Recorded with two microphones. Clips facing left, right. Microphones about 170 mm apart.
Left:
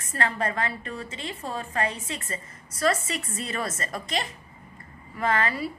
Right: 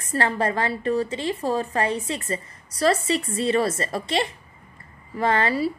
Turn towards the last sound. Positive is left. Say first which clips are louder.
# right 4 dB
turn(degrees=-30)  # may be behind; listen again after turning